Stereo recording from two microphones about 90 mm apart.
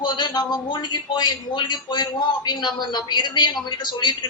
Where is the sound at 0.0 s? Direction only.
55° left (ahead or behind).